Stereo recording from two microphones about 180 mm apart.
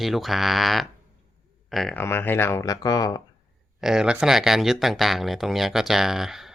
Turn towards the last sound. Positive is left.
turn(degrees=0)  # may be behind; listen again after turning